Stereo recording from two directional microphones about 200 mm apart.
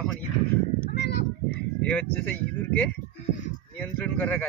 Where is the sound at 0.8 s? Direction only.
55° left (ahead or behind).